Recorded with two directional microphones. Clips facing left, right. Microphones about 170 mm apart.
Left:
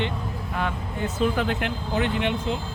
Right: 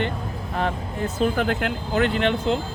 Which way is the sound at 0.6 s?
35° right (ahead or behind).